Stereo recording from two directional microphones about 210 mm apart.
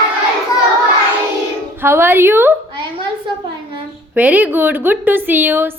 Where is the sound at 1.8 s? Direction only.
10° right (ahead or behind).